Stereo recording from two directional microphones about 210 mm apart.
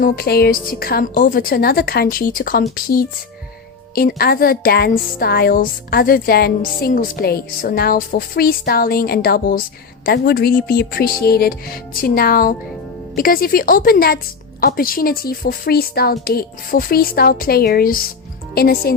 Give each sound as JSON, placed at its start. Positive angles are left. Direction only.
{"t": 0.0, "sound": "speech", "side_deg": 45}